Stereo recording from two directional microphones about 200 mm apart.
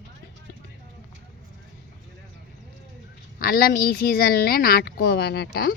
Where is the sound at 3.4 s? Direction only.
50° left (ahead or behind).